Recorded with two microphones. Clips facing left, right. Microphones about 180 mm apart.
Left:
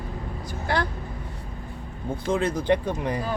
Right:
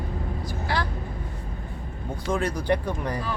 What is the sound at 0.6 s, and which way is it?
Speech, 55° left (ahead or behind).